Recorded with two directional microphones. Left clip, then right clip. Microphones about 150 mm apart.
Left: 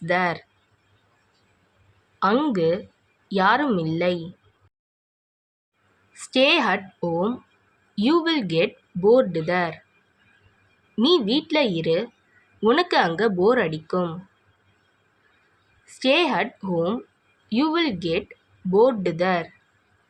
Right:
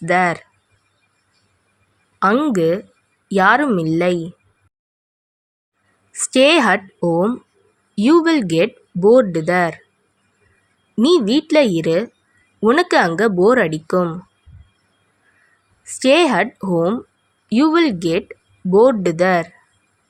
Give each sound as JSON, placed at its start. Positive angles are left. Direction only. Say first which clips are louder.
{"t": 0.0, "sound": "speech", "louder": "right 6 dB", "side_deg": -50}
{"t": 2.3, "sound": "speech", "louder": "right 4 dB", "side_deg": -45}
{"t": 6.1, "sound": "speech", "louder": "right 6 dB", "side_deg": -55}
{"t": 11.0, "sound": "speech", "louder": "right 5 dB", "side_deg": -55}
{"t": 15.8, "sound": "speech", "louder": "right 7 dB", "side_deg": -55}